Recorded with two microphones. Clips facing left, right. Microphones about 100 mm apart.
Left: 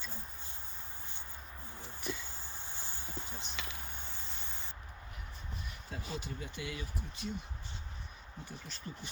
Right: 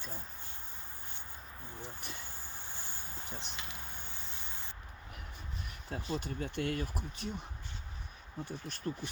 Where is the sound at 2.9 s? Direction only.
15° left (ahead or behind).